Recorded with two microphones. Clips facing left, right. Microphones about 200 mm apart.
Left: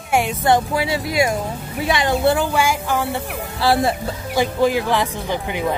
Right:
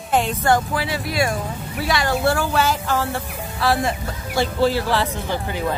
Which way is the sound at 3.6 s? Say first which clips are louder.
Left 3 dB; 30° left (ahead or behind).